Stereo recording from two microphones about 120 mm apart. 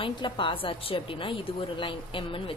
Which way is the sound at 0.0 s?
45° left (ahead or behind).